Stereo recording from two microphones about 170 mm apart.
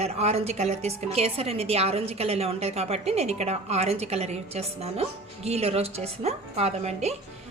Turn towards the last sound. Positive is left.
turn(degrees=-40)  # may be behind; listen again after turning